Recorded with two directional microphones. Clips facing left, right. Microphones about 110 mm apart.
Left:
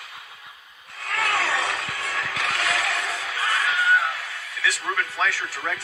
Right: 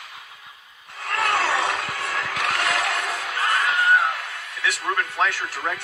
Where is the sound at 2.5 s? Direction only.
50° right (ahead or behind).